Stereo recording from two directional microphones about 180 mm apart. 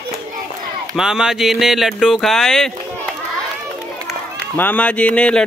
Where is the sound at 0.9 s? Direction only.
5° right (ahead or behind).